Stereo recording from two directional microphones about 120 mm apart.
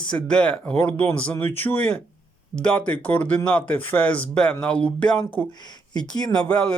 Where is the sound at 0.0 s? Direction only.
10° left (ahead or behind).